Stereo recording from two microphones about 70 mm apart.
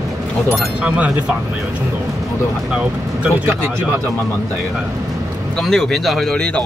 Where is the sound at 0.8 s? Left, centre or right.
Centre.